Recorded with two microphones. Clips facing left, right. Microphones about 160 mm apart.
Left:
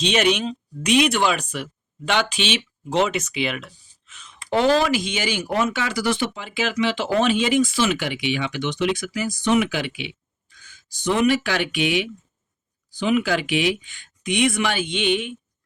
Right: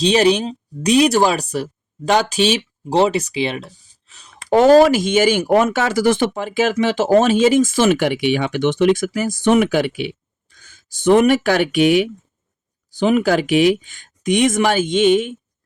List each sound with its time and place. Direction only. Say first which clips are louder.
0.0 s speech: right 6 dB; 35° right (ahead or behind)